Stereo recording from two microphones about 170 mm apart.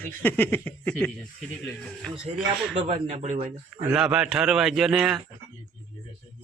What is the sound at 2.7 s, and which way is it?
Speech, 40° right (ahead or behind).